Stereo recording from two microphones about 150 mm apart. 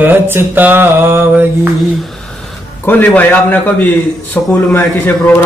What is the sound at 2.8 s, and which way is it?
A man's voice, 10° left (ahead or behind).